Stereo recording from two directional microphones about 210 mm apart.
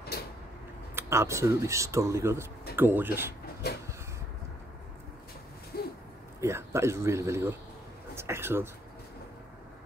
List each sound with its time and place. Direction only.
0.9 s speech: 10° right (ahead or behind)
5.7 s a sound: 45° left (ahead or behind)
6.4 s speech: 10° right (ahead or behind)